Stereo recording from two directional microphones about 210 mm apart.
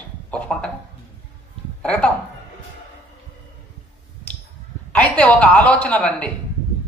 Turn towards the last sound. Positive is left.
turn(degrees=5)  # may be behind; listen again after turning